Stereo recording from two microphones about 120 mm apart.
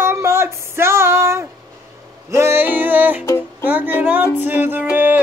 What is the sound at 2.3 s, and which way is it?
Music, 20° right (ahead or behind).